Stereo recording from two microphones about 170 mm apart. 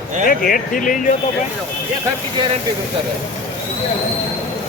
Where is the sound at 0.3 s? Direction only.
55° left (ahead or behind).